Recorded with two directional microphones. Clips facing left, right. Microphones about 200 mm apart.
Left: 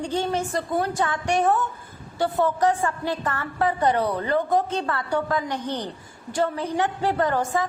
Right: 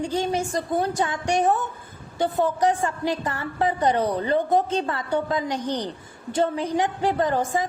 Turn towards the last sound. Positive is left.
turn(degrees=-15)  # may be behind; listen again after turning